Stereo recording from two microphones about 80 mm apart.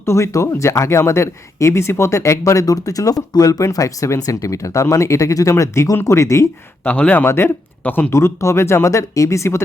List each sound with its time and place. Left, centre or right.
0.0 s speech: left
6.8 s speech: centre
7.3 s speech: left
7.9 s speech: left
8.1 s speech: left